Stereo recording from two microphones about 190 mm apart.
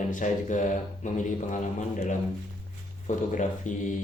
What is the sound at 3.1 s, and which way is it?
Speech, 40° left (ahead or behind).